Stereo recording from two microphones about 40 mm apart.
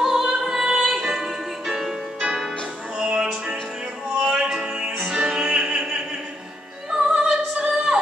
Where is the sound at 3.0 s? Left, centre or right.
Right.